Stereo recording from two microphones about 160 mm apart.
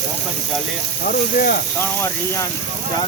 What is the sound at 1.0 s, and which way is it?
Speech, 65° left (ahead or behind).